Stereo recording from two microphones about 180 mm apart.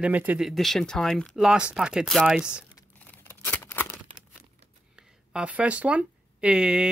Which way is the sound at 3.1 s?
10° left (ahead or behind).